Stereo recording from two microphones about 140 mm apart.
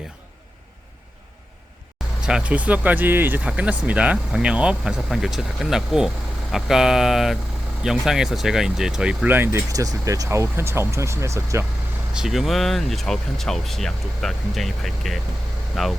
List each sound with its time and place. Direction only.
2.2 s speech: 5° right (ahead or behind)
12.1 s speech: centre (ahead or behind)